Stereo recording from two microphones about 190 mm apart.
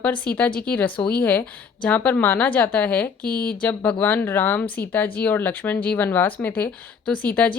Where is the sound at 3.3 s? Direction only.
50° left (ahead or behind).